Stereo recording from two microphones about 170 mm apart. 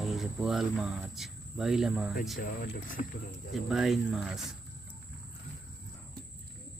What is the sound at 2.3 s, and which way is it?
Speech, 60° left (ahead or behind).